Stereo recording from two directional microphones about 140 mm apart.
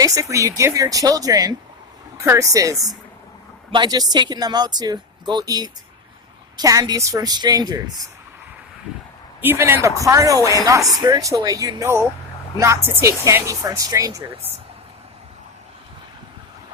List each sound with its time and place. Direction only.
0.0 s speech: 25° right (ahead or behind)
9.4 s a man's voice: 15° right (ahead or behind)